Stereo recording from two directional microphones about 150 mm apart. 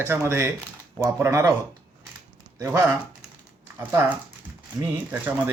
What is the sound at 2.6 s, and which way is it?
Speech, 20° right (ahead or behind).